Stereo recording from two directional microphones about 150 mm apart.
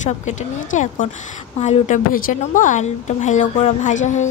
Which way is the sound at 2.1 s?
65° left (ahead or behind).